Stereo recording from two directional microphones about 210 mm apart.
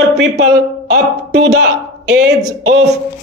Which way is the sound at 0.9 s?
55° right (ahead or behind).